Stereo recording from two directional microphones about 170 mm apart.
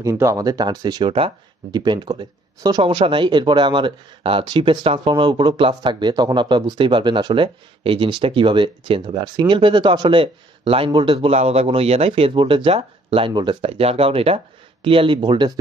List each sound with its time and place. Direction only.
0.0 s speech: 15° right (ahead or behind)